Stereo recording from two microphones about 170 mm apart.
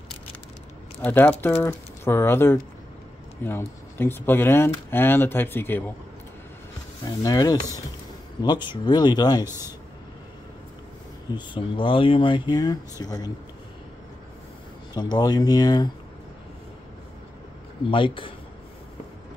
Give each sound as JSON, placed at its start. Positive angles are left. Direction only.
{"t": 1.0, "sound": "speech", "side_deg": 10}
{"t": 7.1, "sound": "speech", "side_deg": 20}
{"t": 11.3, "sound": "speech", "side_deg": 30}
{"t": 15.0, "sound": "speech", "side_deg": 25}
{"t": 17.8, "sound": "speech", "side_deg": 30}